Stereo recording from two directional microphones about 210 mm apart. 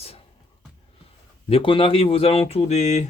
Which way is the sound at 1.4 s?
25° left (ahead or behind).